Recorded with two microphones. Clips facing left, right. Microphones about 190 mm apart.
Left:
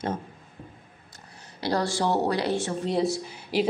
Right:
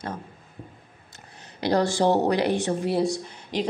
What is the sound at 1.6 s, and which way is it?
Speech, 20° right (ahead or behind).